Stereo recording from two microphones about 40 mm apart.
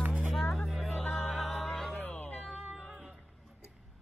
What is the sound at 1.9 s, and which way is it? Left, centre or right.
Cat, left.